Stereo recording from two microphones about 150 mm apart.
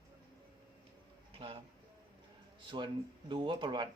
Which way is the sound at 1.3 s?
35° right (ahead or behind).